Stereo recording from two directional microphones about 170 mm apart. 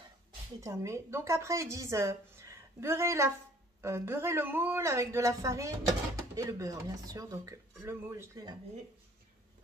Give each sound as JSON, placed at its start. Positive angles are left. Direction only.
{"t": 0.6, "sound": "a woman's voice", "side_deg": -15}